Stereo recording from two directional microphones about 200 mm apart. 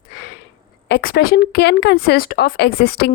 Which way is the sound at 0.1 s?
60° left (ahead or behind).